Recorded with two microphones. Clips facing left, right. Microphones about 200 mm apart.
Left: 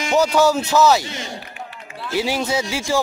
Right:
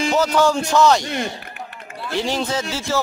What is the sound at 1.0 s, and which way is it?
Speech, 55° right (ahead or behind).